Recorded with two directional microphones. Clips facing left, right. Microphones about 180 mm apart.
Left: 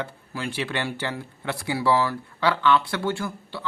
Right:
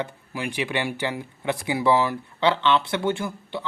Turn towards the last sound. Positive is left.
turn(degrees=-20)  # may be behind; listen again after turning